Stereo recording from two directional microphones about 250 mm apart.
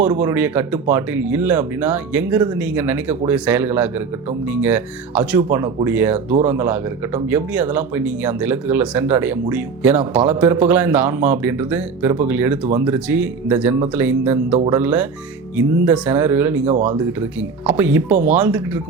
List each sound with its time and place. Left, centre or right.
0.0 s speech: centre
16.6 s speech: right
17.7 s speech: centre